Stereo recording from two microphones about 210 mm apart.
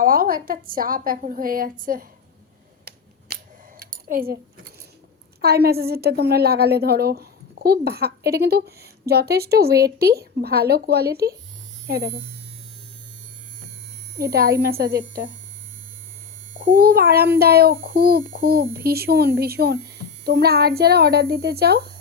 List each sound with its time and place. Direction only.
0.0 s a woman's voice: 45° right (ahead or behind)
3.3 s scissors: 50° right (ahead or behind)
3.8 s a sound: 45° right (ahead or behind)
5.4 s a woman's voice: 50° right (ahead or behind)
14.2 s a woman's voice: 45° right (ahead or behind)
16.6 s a woman's voice: 45° right (ahead or behind)